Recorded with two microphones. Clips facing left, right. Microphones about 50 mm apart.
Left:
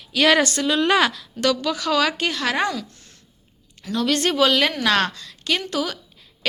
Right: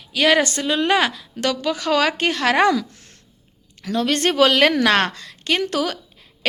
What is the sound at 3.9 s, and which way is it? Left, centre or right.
A woman's voice, right.